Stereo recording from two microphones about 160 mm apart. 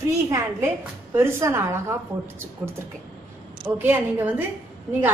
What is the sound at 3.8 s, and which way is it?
Speech, 10° right (ahead or behind).